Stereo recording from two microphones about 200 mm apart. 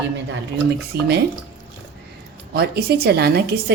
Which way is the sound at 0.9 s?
55° right (ahead or behind).